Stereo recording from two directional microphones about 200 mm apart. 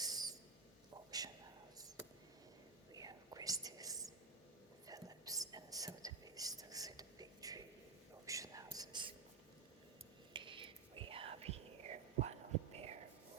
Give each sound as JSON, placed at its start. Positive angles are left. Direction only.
{"t": 0.0, "sound": "owl", "side_deg": -20}
{"t": 2.9, "sound": "whispering", "side_deg": -20}
{"t": 10.3, "sound": "whispering", "side_deg": -25}